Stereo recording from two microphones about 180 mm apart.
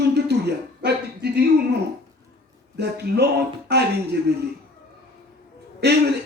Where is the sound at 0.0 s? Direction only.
65° right (ahead or behind).